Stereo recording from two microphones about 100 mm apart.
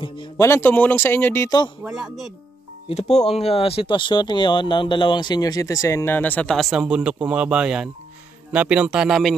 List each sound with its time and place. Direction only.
0.4 s speech: 25° left (ahead or behind)
1.8 s speech: 5° right (ahead or behind)
2.9 s speech: 90° left; by 6.5 s 15° left (ahead or behind)
6.5 s speech: centre (ahead or behind)